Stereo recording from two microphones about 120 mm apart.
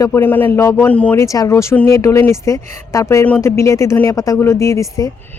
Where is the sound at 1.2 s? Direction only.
25° left (ahead or behind).